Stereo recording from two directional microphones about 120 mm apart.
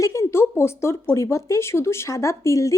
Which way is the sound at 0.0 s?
25° left (ahead or behind).